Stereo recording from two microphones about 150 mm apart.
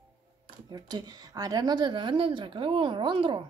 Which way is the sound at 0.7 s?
25° right (ahead or behind).